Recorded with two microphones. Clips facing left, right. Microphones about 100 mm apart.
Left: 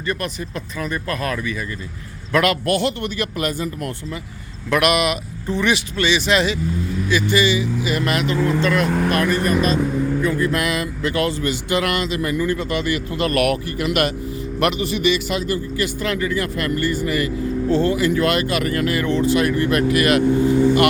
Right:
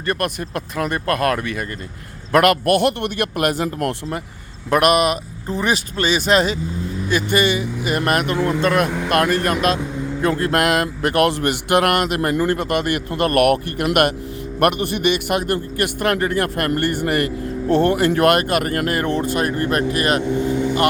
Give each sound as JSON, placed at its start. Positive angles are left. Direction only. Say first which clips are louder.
{"t": 0.0, "sound": "a man's voice", "louder": "right 3 dB", "side_deg": -60}
{"t": 4.7, "sound": "a man's voice", "louder": "right 2 dB", "side_deg": -40}